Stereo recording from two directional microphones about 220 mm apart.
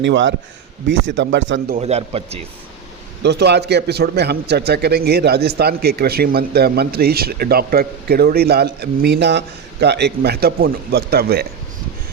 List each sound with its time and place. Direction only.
0.0 s speech: 55° right (ahead or behind)
1.7 s a man's voice: 30° right (ahead or behind)
3.2 s a man's voice: 50° right (ahead or behind)